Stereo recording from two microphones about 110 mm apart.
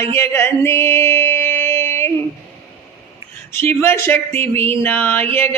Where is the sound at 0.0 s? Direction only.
20° left (ahead or behind).